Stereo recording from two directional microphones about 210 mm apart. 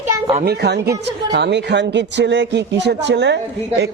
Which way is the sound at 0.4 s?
50° right (ahead or behind).